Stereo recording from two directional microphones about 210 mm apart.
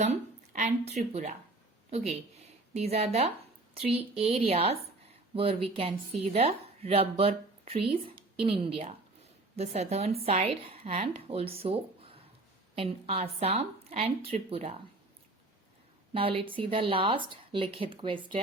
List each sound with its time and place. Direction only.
0.0 s a woman's voice: 35° right (ahead or behind)
16.1 s a woman's voice: 25° right (ahead or behind)